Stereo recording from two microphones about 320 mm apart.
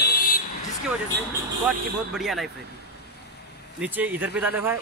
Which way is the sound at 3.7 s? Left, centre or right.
Centre.